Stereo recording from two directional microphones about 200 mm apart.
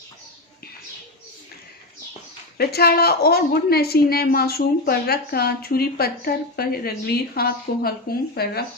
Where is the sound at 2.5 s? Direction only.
50° left (ahead or behind).